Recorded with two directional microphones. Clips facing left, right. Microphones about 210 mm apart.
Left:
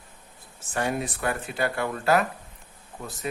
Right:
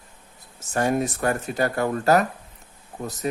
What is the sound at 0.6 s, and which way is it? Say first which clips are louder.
Speech: right 5 dB; 40° right (ahead or behind).